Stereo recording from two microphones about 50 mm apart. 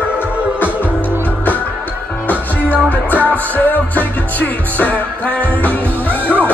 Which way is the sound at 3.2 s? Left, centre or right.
Left.